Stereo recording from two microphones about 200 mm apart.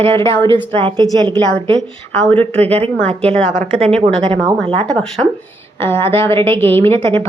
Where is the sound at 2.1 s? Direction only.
10° left (ahead or behind).